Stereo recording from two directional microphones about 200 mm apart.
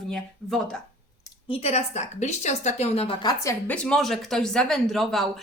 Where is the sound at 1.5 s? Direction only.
30° left (ahead or behind).